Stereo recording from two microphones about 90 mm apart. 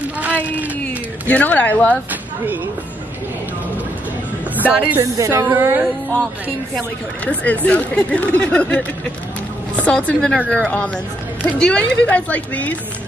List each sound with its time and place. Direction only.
0.2 s a sound: 15° right (ahead or behind)
1.2 s speech: 15° left (ahead or behind)
4.6 s speech: 15° right (ahead or behind)
5.1 s a woman's voice: 35° right (ahead or behind)
5.6 s music: 25° right (ahead or behind)
7.2 s speech: 15° left (ahead or behind)